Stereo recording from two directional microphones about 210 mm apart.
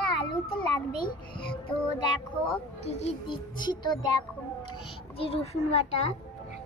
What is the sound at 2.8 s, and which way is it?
A child's voice, 25° left (ahead or behind).